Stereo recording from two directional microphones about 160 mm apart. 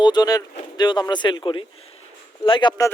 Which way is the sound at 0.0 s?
25° left (ahead or behind).